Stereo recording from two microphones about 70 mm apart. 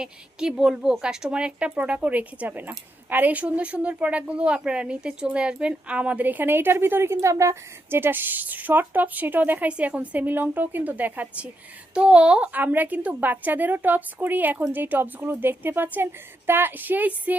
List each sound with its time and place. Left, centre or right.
0.0 s a woman's voice: centre